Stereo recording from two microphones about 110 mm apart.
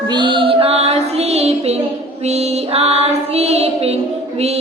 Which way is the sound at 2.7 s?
70° right (ahead or behind).